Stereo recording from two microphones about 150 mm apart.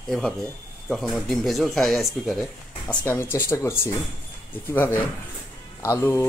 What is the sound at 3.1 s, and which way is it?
Speech, 15° left (ahead or behind).